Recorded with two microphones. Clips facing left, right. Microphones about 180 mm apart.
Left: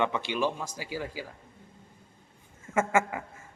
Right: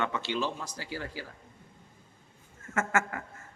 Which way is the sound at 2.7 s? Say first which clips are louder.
Left 4 dB; 15° left (ahead or behind).